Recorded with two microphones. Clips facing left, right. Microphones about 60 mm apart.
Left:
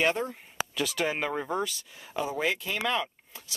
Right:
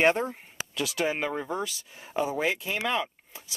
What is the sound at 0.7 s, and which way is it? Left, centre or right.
Speech, centre.